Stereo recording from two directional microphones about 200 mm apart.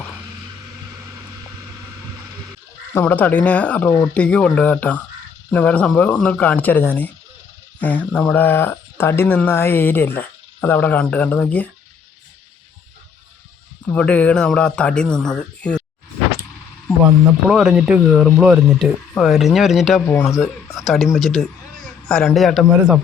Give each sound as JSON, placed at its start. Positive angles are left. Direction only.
{"t": 2.9, "sound": "speech", "side_deg": 10}
{"t": 13.8, "sound": "speech", "side_deg": 5}
{"t": 17.5, "sound": "a man's voice", "side_deg": -5}